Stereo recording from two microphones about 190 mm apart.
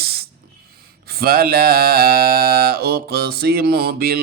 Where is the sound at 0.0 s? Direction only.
55° right (ahead or behind).